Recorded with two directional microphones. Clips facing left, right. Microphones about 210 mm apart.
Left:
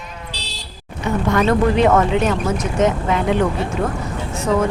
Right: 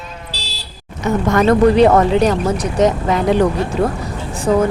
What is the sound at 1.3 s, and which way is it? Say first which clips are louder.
Speech: right 5 dB; 35° right (ahead or behind).